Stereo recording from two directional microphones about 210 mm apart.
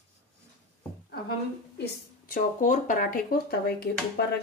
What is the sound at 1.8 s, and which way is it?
A woman's voice, 40° left (ahead or behind).